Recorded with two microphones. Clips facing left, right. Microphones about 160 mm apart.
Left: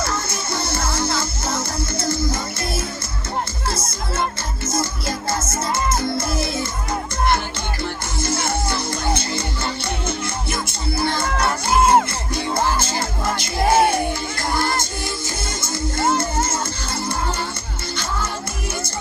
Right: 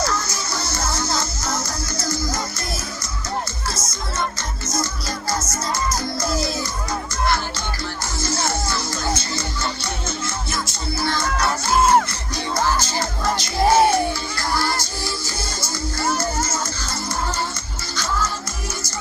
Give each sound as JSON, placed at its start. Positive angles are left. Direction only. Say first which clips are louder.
{"t": 0.0, "sound": "music", "louder": "right 1 dB", "side_deg": 25}
{"t": 5.9, "sound": "music", "louder": "left 3 dB", "side_deg": 25}
{"t": 8.2, "sound": "music", "louder": "left 2 dB", "side_deg": 55}
{"t": 10.1, "sound": "music", "louder": "left 2 dB", "side_deg": 55}
{"t": 11.0, "sound": "music", "louder": "left 1 dB", "side_deg": 25}
{"t": 11.3, "sound": "music", "louder": "left 1 dB", "side_deg": 55}
{"t": 11.7, "sound": "music", "louder": "left 1 dB", "side_deg": 10}
{"t": 12.7, "sound": "music", "louder": "even", "side_deg": 55}
{"t": 14.5, "sound": "music", "louder": "left 1 dB", "side_deg": 20}